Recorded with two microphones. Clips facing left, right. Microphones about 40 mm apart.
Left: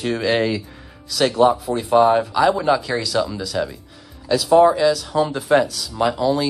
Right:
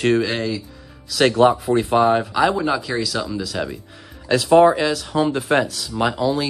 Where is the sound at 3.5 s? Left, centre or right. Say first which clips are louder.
Left 2 dB; centre.